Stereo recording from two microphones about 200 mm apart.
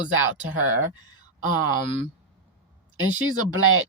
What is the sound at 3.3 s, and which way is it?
Speech, 90° right.